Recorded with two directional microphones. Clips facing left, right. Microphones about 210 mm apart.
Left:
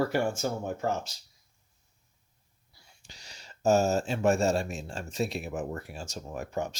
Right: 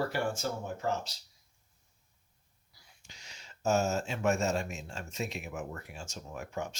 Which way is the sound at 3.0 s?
35° left (ahead or behind).